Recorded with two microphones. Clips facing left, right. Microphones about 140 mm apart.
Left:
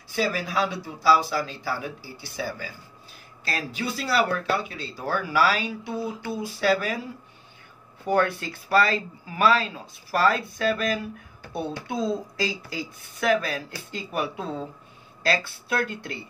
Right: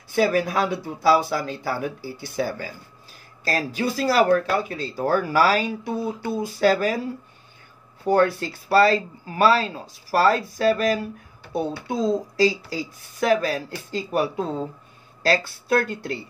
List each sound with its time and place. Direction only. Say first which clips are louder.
0.1 s speech: right 6 dB; 50° right (ahead or behind)
3.4 s speech: right 6 dB; 40° right (ahead or behind)
8.1 s speech: right 4 dB; 35° right (ahead or behind)